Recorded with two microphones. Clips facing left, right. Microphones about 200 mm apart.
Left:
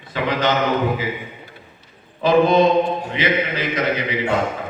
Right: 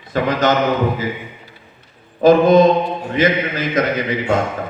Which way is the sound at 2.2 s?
45° right (ahead or behind).